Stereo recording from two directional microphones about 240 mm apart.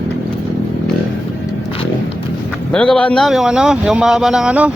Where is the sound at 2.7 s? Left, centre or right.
Centre.